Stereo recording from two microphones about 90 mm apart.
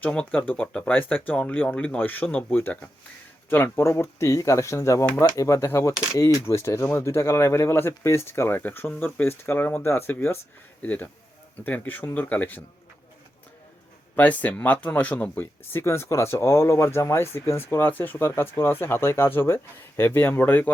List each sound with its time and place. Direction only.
0.0 s speech: 15° left (ahead or behind)
14.2 s speech: 15° left (ahead or behind)